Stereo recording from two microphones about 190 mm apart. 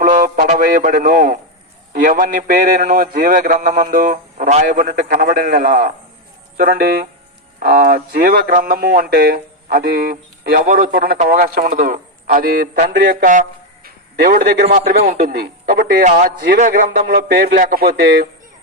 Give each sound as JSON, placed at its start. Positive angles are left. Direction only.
{"t": 0.0, "sound": "a man's voice", "side_deg": -45}